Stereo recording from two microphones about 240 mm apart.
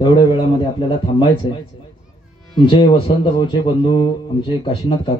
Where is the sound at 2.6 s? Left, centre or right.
Left.